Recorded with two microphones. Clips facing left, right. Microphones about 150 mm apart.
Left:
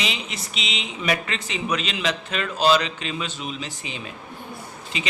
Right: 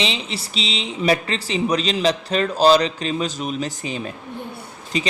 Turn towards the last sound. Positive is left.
turn(degrees=-40)  # may be behind; listen again after turning